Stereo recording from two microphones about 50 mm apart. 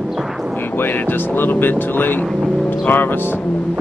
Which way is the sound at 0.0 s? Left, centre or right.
Centre.